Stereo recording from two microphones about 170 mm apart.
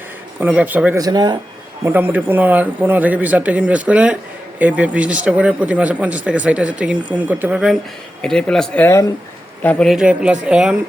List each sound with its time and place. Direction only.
0.3 s a man's voice: 10° right (ahead or behind)
0.9 s speech: 20° right (ahead or behind)
1.8 s a man's voice: 10° right (ahead or behind); by 9.0 s 15° left (ahead or behind)
9.6 s speech: centre (ahead or behind)